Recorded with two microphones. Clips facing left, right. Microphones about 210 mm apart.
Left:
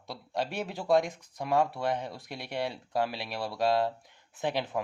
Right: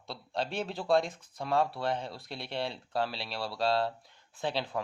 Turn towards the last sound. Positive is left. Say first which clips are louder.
# left 2 dB
turn(degrees=15)  # may be behind; listen again after turning